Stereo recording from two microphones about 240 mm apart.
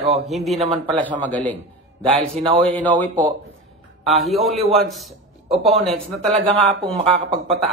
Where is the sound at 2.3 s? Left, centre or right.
Right.